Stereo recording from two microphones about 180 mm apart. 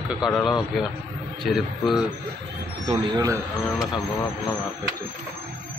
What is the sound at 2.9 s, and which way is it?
Speech, 20° right (ahead or behind).